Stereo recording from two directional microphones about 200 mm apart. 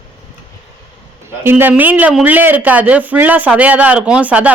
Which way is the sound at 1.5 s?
10° right (ahead or behind).